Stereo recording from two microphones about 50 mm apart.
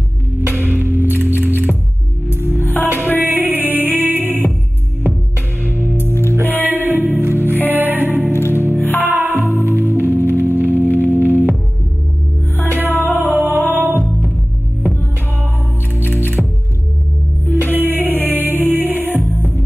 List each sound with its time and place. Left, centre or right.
0.5 s music: right
2.5 s music: left
2.8 s music: right
6.0 s music: left
6.5 s music: right
8.3 s music: left
8.7 s music: left
9.0 s music: right
12.6 s music: right
16.4 s music: centre
17.7 s music: right